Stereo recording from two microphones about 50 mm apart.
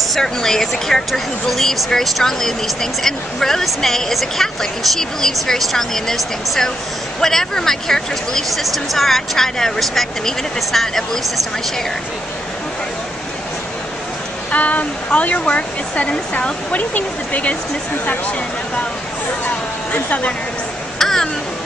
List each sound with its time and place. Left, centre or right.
0.1 s speech: centre
14.5 s speech: left
19.9 s speech: left
21.0 s a sound: centre